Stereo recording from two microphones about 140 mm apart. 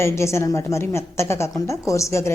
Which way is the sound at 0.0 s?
20° left (ahead or behind).